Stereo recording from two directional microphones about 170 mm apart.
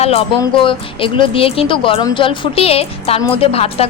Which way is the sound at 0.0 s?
35° left (ahead or behind).